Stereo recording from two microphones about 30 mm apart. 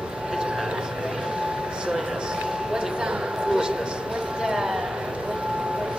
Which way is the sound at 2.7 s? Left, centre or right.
Right.